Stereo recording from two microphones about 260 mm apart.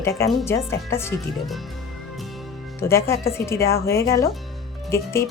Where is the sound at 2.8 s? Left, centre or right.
Centre.